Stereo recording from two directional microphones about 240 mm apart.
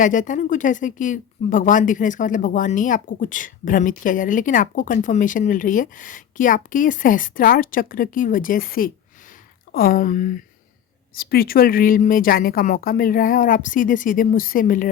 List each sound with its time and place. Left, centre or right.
0.0 s speech: left